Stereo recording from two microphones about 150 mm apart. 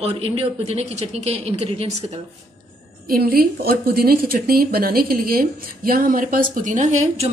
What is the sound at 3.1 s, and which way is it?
A woman's voice, 85° right.